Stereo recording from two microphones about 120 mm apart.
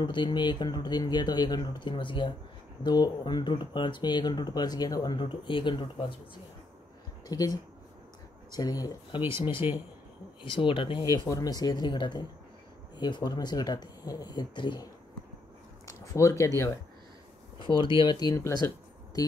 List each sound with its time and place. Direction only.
0.0 s speech: 40° left (ahead or behind)
7.2 s speech: 35° left (ahead or behind)
9.1 s speech: 45° left (ahead or behind)
9.6 s speech: 15° right (ahead or behind)
10.4 s speech: 45° left (ahead or behind)
11.2 s speech: 30° left (ahead or behind)
15.8 s speech: 30° left (ahead or behind)
17.7 s speech: 5° left (ahead or behind)
18.0 s speech: 35° left (ahead or behind)